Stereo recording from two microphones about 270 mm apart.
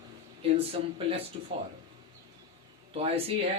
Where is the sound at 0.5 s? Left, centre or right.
Right.